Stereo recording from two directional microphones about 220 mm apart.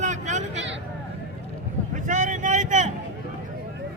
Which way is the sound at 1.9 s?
35° right (ahead or behind).